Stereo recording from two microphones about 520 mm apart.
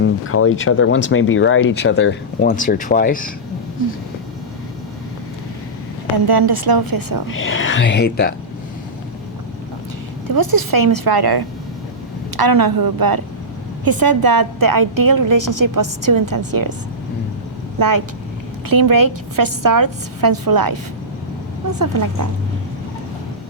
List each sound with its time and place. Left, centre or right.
0.0 s speech: left
6.2 s a woman's voice: right
7.3 s speech: left
10.2 s a woman's voice: right
17.7 s a woman's voice: right